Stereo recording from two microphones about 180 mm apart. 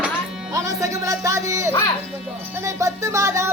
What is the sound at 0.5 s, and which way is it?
Music, 15° right (ahead or behind).